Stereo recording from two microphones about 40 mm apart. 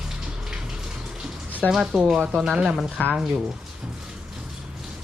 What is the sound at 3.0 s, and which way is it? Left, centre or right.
Speech, left.